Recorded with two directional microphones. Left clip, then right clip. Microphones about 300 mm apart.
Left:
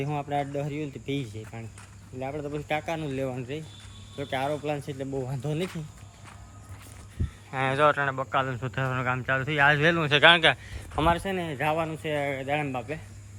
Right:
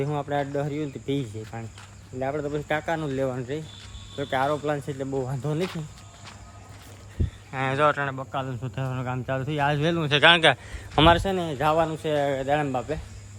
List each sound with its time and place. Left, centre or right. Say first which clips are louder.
0.0 s speech: right 2 dB; centre
2.2 s speech: right 5 dB; right
2.5 s speech: right 3 dB; centre
7.5 s speech: even; centre
10.9 s speech: right 6 dB; right
11.2 s speech: right 4 dB; centre